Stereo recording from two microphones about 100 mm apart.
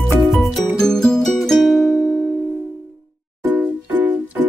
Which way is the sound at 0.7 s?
5° left (ahead or behind).